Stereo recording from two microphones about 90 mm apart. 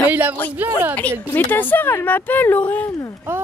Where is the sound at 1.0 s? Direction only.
20° left (ahead or behind).